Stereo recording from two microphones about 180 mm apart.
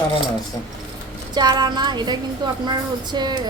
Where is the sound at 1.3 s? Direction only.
25° right (ahead or behind).